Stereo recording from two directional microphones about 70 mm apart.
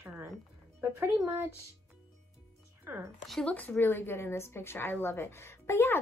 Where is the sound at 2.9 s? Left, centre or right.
Right.